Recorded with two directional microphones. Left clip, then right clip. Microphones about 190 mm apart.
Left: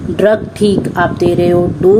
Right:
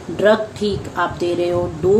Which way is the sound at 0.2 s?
45° left (ahead or behind).